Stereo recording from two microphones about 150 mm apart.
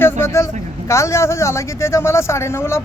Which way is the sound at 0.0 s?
15° left (ahead or behind).